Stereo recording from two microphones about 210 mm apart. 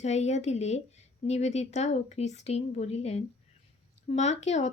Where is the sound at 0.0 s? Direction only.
30° left (ahead or behind).